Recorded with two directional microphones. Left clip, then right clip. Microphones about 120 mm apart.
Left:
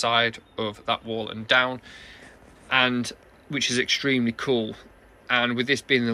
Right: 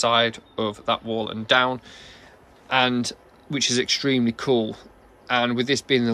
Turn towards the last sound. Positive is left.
turn(degrees=-50)  # may be behind; listen again after turning